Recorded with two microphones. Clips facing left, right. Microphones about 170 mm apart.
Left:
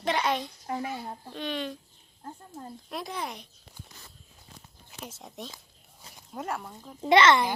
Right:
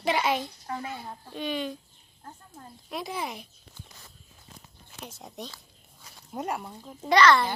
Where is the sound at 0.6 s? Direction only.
20° left (ahead or behind).